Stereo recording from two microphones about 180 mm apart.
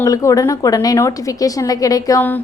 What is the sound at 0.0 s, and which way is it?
A woman's voice, 15° left (ahead or behind).